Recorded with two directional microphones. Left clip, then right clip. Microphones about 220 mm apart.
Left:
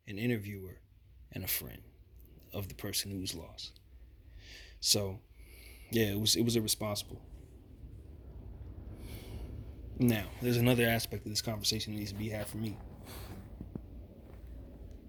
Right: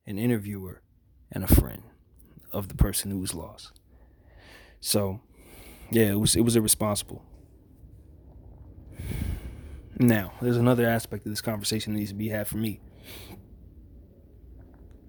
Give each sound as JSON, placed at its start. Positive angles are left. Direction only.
{"t": 0.1, "sound": "speech", "side_deg": -40}
{"t": 1.3, "sound": "speech", "side_deg": -35}
{"t": 10.0, "sound": "speech", "side_deg": -35}